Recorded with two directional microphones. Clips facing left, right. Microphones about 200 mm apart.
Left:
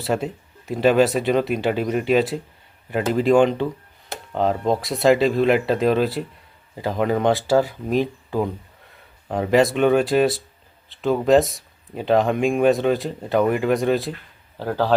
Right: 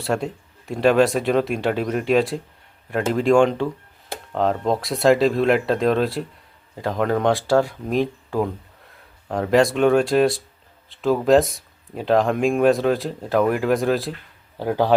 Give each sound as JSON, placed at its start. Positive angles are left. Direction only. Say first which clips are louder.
{"t": 0.0, "sound": "speech", "louder": "even", "side_deg": 0}
{"t": 14.6, "sound": "a man's voice", "louder": "right 2 dB", "side_deg": -10}